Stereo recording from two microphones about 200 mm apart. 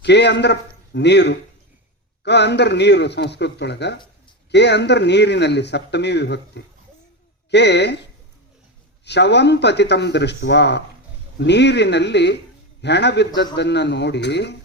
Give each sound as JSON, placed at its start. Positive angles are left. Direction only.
{"t": 0.0, "sound": "a man's voice", "side_deg": 60}
{"t": 9.0, "sound": "a man's voice", "side_deg": 60}